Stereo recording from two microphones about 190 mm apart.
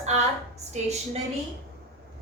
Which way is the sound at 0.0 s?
35° right (ahead or behind).